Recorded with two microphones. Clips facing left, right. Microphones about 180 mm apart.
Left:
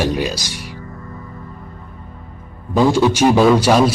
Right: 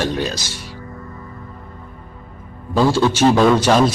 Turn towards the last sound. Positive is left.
turn(degrees=10)  # may be behind; listen again after turning